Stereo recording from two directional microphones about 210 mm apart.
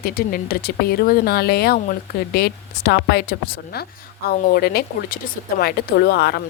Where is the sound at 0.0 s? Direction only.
45° left (ahead or behind).